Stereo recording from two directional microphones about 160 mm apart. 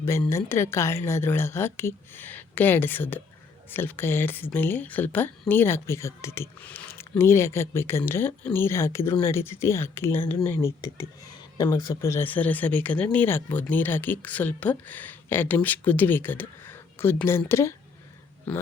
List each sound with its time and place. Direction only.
0.0 s speech: 15° left (ahead or behind)